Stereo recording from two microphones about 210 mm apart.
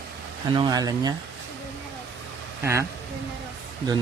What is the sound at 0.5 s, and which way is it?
Speech, 20° right (ahead or behind).